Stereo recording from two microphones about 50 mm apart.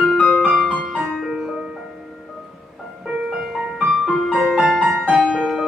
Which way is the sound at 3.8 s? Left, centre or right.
Centre.